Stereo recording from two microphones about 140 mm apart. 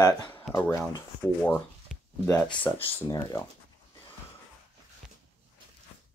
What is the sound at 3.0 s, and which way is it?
Speech, 30° left (ahead or behind).